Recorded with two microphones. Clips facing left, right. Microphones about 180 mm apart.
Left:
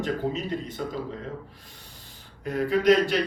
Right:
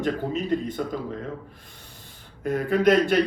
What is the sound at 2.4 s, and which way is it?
Speech, 50° right (ahead or behind).